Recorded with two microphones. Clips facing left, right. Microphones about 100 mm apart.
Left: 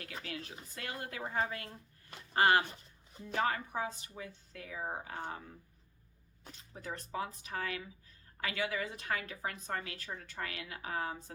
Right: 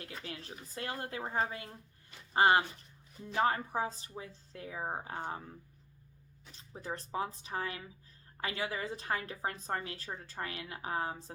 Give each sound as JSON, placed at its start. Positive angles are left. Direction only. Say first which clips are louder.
{"t": 0.3, "sound": "a woman's voice", "louder": "left 1 dB", "side_deg": -30}
{"t": 6.8, "sound": "a woman's voice", "louder": "right 2 dB", "side_deg": -30}